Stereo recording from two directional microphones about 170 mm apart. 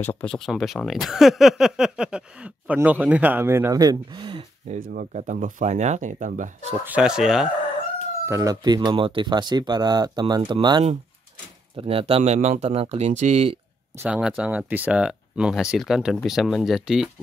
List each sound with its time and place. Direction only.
0.0 s speech: 10° left (ahead or behind); by 4.5 s 30° right (ahead or behind)
4.6 s speech: 50° right (ahead or behind)
6.9 s speech: 5° right (ahead or behind)
8.3 s speech: 20° right (ahead or behind); by 13.6 s 40° right (ahead or behind)
13.9 s speech: 5° right (ahead or behind)